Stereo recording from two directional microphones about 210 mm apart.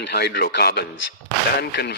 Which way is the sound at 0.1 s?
50° left (ahead or behind).